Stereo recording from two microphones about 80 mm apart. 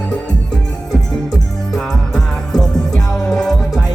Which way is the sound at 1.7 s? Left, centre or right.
Centre.